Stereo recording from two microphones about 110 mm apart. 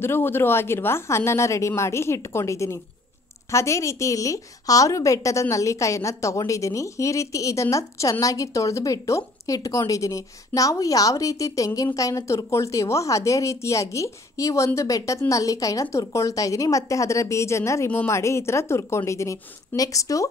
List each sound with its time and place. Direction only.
0.0 s a woman's voice: 20° left (ahead or behind)